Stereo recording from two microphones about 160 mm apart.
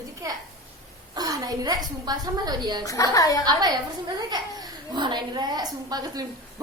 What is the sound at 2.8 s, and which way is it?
Speech, 20° left (ahead or behind).